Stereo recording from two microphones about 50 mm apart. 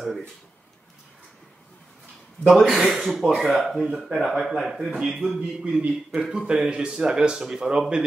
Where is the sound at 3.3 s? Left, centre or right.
Centre.